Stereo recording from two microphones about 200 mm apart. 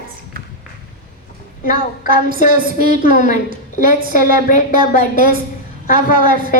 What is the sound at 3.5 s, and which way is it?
Speech, 45° right (ahead or behind).